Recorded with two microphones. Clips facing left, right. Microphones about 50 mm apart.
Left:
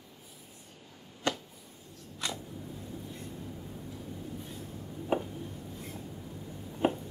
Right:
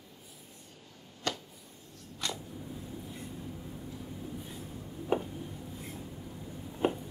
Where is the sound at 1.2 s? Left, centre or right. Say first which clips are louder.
Left 3 dB; left.